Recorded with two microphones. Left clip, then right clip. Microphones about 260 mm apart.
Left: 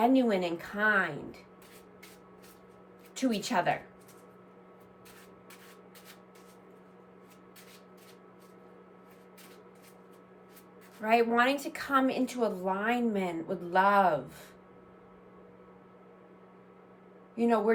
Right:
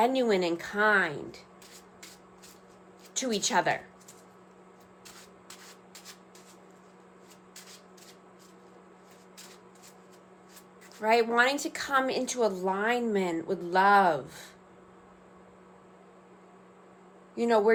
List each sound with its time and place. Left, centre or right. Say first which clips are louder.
0.0 s a woman's voice: right 1 dB; right
3.2 s a woman's voice: right 3 dB; right
11.0 s a woman's voice: right 2 dB; right
17.3 s a woman's voice: right 3 dB; right